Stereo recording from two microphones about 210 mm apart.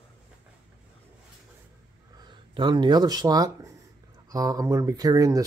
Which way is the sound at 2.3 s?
20° right (ahead or behind).